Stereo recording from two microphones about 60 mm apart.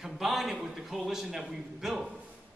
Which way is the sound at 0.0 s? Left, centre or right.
Centre.